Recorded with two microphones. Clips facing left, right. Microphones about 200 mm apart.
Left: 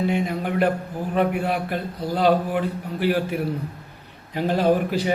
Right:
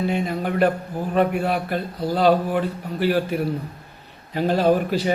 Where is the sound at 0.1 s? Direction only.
15° left (ahead or behind).